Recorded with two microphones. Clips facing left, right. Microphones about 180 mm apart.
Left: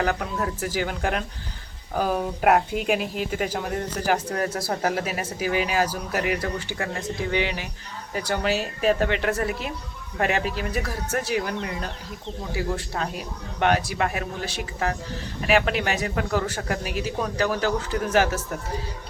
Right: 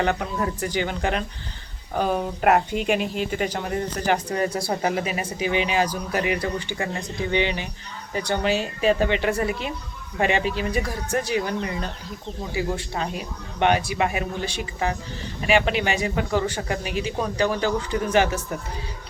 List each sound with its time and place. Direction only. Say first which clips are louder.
0.0 s a man's voice: right 1 dB; centre (ahead or behind)